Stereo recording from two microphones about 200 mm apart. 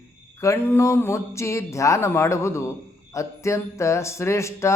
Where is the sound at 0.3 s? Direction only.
15° left (ahead or behind).